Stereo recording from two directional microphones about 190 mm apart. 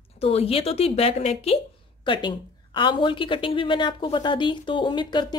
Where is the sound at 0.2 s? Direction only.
30° left (ahead or behind).